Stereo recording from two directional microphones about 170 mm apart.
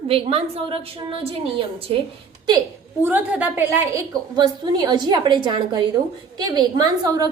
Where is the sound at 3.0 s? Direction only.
10° right (ahead or behind).